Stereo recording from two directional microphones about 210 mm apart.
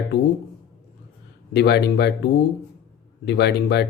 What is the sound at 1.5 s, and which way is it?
Speech, 55° left (ahead or behind).